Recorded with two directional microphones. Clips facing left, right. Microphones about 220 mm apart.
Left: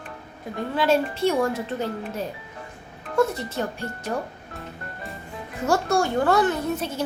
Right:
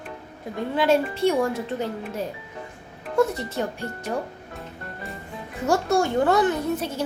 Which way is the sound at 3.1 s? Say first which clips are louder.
Right 1 dB; 15° right (ahead or behind).